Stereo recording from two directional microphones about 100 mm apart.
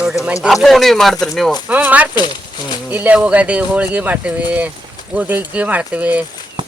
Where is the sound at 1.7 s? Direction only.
15° right (ahead or behind).